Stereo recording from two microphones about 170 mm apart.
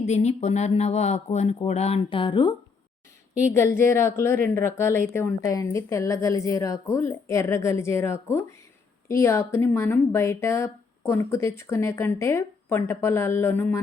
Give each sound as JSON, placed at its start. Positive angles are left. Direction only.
{"t": 0.0, "sound": "speech", "side_deg": 40}
{"t": 3.8, "sound": "speech", "side_deg": 15}